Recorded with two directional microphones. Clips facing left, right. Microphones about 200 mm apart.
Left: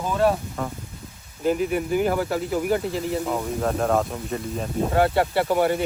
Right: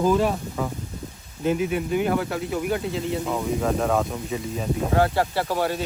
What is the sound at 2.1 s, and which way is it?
Speech, 5° left (ahead or behind).